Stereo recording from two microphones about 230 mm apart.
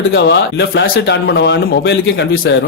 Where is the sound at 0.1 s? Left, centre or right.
Left.